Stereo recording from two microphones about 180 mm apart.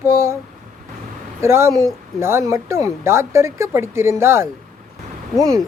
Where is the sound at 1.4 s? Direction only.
15° right (ahead or behind).